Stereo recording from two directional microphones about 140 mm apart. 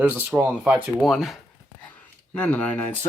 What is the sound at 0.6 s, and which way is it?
Speech, 5° right (ahead or behind).